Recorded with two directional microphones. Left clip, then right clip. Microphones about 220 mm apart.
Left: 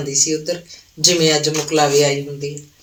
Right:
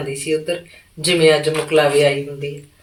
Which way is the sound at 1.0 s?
35° left (ahead or behind).